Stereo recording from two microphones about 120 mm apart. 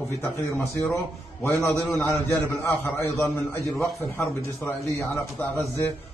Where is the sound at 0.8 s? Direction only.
15° left (ahead or behind).